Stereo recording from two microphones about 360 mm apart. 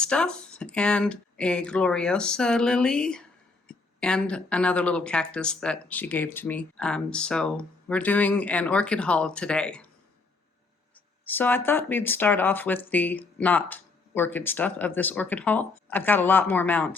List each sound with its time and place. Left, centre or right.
0.0 s speech: centre
11.3 s speech: centre